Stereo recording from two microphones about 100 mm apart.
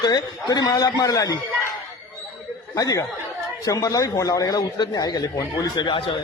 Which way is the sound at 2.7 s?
35° left (ahead or behind).